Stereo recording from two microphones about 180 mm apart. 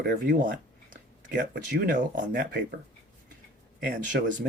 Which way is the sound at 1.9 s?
45° right (ahead or behind).